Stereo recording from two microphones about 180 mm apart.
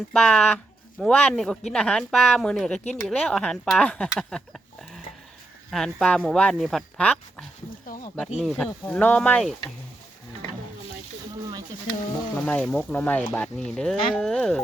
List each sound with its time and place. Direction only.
0.1 s speech: 5° left (ahead or behind)
7.9 s a sound: 50° left (ahead or behind)
8.4 s speech: centre (ahead or behind)
12.5 s speech: 5° left (ahead or behind)